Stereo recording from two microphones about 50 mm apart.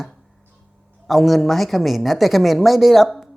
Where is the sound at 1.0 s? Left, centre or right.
Centre.